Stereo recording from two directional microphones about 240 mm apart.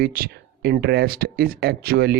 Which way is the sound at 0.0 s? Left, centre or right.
Right.